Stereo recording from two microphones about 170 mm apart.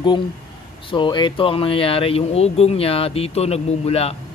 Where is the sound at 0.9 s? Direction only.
25° left (ahead or behind).